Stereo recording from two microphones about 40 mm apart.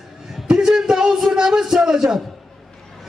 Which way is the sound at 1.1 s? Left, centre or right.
Centre.